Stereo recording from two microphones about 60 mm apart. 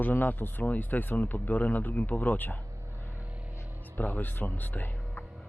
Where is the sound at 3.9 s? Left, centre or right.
Left.